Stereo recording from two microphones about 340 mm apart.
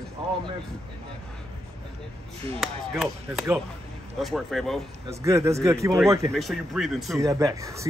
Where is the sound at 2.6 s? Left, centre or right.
Centre.